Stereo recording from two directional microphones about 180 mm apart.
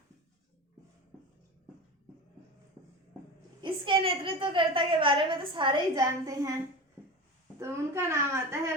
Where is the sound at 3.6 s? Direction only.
30° right (ahead or behind).